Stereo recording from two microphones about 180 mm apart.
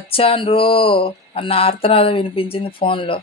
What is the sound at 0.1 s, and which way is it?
Speech, 30° left (ahead or behind).